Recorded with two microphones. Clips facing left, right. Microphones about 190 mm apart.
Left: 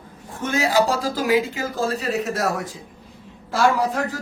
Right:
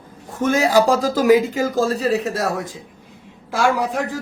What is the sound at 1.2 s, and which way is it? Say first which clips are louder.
A man's voice: right 7 dB; 45° right (ahead or behind).